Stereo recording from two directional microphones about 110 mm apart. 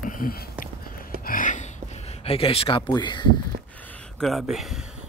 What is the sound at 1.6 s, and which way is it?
Speech, 90° left.